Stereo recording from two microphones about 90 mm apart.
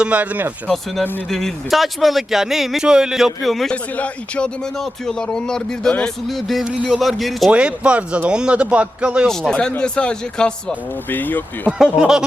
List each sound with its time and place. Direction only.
0.0 s speech: 15° right (ahead or behind)
1.3 s speech: 5° left (ahead or behind)
3.9 s speech: 15° left (ahead or behind)
6.7 s speech: 10° right (ahead or behind)
7.0 s speech: centre (ahead or behind)
7.5 s speech: 10° right (ahead or behind)
9.2 s speech: 5° left (ahead or behind)
11.8 s speech: 5° right (ahead or behind)